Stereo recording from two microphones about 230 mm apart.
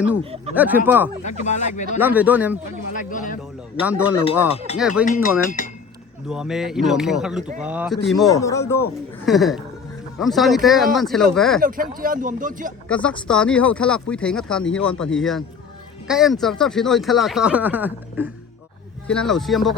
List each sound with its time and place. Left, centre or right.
0.2 s speech: right
0.5 s speech: centre
1.2 s speech: left
2.0 s speech: centre
2.9 s speech: left
3.8 s speech: centre
4.5 s speech: left
4.8 s speech: centre
5.0 s speech: left
6.2 s speech: centre
8.3 s speech: centre
9.2 s speech: centre
11.6 s speech: right
12.9 s speech: centre